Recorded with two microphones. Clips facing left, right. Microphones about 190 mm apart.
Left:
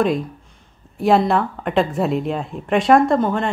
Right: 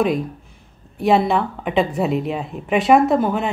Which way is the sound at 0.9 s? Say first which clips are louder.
Left 1 dB; centre (ahead or behind).